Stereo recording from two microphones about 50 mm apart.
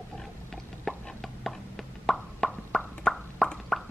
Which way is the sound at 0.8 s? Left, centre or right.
Centre.